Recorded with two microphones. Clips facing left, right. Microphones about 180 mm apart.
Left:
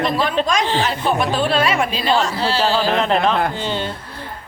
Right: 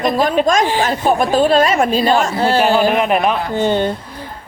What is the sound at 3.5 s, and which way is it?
Speech, 50° right (ahead or behind).